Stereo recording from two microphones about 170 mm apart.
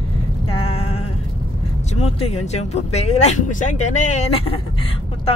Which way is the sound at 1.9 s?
40° left (ahead or behind).